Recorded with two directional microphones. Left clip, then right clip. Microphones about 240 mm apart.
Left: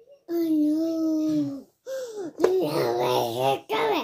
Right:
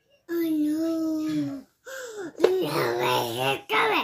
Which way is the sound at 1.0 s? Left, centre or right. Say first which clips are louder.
Left 3 dB; right.